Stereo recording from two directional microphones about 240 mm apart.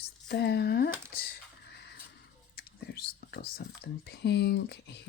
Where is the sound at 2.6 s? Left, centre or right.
Left.